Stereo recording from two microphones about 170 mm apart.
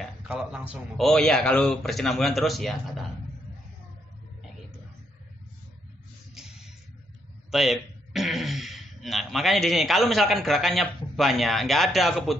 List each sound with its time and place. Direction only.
0.0 s a man's voice: centre (ahead or behind)
7.5 s a man's voice: centre (ahead or behind)